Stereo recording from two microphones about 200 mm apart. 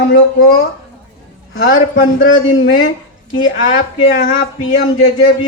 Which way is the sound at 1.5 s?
50° left (ahead or behind).